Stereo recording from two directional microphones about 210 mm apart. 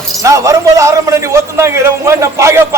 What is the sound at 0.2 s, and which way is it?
A man's voice, 15° right (ahead or behind).